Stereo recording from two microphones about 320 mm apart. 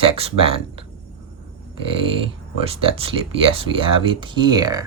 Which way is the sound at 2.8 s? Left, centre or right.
Centre.